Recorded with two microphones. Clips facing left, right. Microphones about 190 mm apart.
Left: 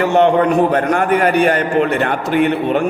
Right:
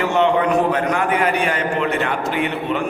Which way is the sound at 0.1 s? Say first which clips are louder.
Left 3 dB; 50° left (ahead or behind).